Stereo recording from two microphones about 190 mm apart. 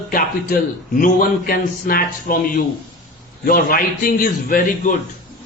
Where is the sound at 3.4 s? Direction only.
50° left (ahead or behind).